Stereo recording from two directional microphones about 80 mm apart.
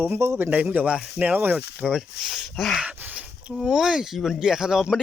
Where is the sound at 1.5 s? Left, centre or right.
Centre.